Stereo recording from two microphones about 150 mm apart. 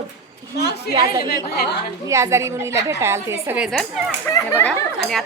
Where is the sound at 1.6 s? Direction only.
90° left.